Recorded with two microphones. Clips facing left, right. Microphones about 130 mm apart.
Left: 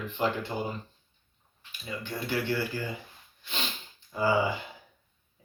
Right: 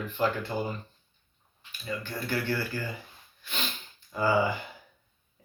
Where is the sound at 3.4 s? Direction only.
25° left (ahead or behind).